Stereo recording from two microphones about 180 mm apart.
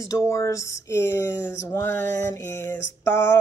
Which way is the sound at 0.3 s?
15° left (ahead or behind).